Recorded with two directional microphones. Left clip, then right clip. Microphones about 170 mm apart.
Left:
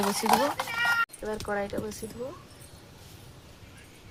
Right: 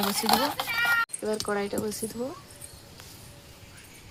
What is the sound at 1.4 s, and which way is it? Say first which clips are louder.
Speech: left 2 dB; 65° right (ahead or behind).